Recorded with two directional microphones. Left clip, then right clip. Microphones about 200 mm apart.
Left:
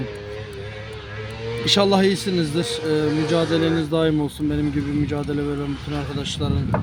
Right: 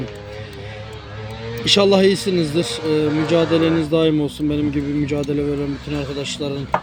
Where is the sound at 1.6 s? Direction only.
10° left (ahead or behind).